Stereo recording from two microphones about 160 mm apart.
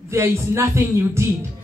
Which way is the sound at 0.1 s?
15° right (ahead or behind).